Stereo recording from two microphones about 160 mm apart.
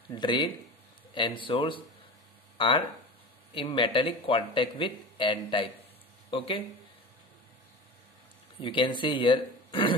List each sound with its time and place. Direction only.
0.1 s speech: 25° left (ahead or behind)
8.5 s speech: 30° left (ahead or behind)